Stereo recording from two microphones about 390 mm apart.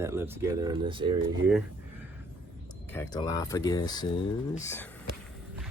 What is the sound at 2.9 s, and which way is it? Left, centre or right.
Speech, centre.